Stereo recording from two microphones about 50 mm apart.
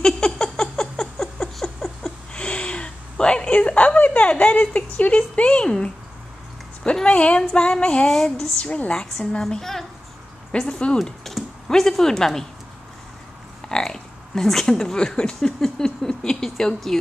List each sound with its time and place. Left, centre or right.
0.0 s a sound: centre
2.3 s a sound: left
6.8 s a woman's voice: centre
8.1 s speech: centre
8.6 s a woman's voice: left
8.9 s speech: centre
10.7 s a woman's voice: centre
11.0 s speech: centre
13.7 s a sound: centre
14.7 s speech: centre